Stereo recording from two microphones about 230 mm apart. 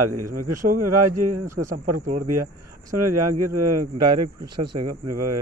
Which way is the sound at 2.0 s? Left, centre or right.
Right.